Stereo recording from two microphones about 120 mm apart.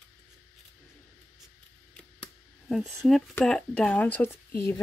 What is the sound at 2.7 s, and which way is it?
Speech, centre (ahead or behind).